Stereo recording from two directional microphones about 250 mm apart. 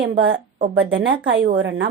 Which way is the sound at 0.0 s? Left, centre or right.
Right.